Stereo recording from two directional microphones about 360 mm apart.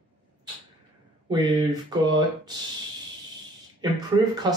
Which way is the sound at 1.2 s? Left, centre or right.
Centre.